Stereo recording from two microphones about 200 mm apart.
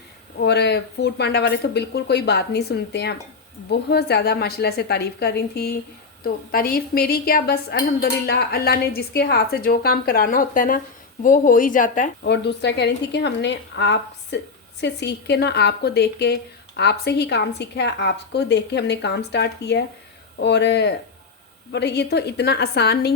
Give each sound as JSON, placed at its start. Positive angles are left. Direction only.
{"t": 0.3, "sound": "a woman's voice", "side_deg": 55}
{"t": 12.2, "sound": "a woman's voice", "side_deg": 60}